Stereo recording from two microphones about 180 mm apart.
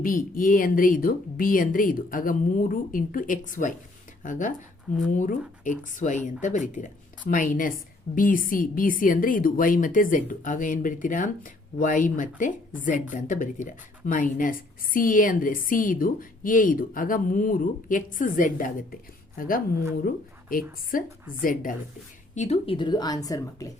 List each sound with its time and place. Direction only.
0.0 s a woman's voice: 50° left (ahead or behind)
22.4 s a woman's voice: 35° left (ahead or behind); by 23.7 s 20° left (ahead or behind)